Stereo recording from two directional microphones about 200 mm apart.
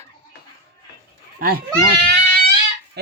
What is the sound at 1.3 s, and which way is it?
Speech, 45° right (ahead or behind).